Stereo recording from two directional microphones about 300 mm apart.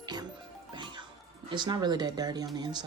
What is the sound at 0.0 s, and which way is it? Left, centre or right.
Music, centre.